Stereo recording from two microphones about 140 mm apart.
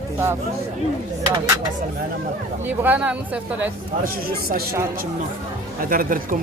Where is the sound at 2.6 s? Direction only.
10° right (ahead or behind).